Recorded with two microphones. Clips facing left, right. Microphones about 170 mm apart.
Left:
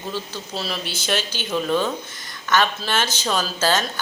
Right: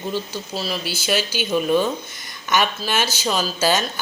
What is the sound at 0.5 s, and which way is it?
Speech, centre (ahead or behind).